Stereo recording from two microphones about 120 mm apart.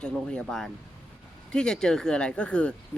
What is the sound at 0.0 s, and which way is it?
Speech, 5° left (ahead or behind).